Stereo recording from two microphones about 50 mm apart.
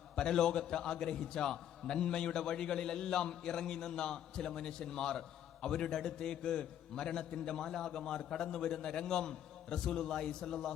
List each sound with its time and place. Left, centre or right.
0.2 s a man's voice: centre